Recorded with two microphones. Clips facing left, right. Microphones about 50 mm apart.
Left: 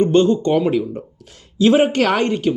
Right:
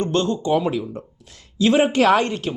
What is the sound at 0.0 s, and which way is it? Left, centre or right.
Speech, left.